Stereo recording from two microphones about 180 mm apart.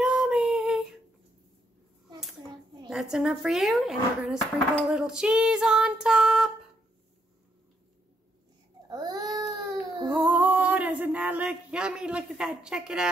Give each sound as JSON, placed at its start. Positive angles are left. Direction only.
{"t": 0.0, "sound": "child singing", "side_deg": -5}
{"t": 2.9, "sound": "female singing", "side_deg": -5}
{"t": 8.8, "sound": "baby cry", "side_deg": -20}
{"t": 10.1, "sound": "a sound", "side_deg": -10}